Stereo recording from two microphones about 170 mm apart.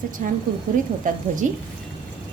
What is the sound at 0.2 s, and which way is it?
Speech, 50° right (ahead or behind).